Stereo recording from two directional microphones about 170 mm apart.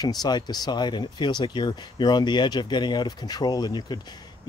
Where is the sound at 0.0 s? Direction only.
25° left (ahead or behind).